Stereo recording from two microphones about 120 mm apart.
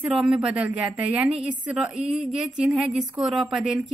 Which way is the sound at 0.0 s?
10° right (ahead or behind).